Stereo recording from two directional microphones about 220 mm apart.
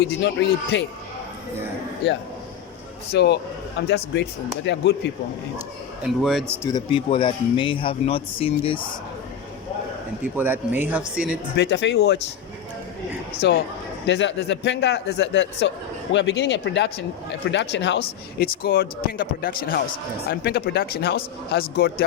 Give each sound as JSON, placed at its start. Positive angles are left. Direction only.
{"t": 0.0, "sound": "speech", "side_deg": 55}
{"t": 3.1, "sound": "speech", "side_deg": 50}
{"t": 6.0, "sound": "speech", "side_deg": 0}
{"t": 6.6, "sound": "speech", "side_deg": 15}
{"t": 10.3, "sound": "speech", "side_deg": -10}
{"t": 11.5, "sound": "speech", "side_deg": 50}
{"t": 13.4, "sound": "speech", "side_deg": 50}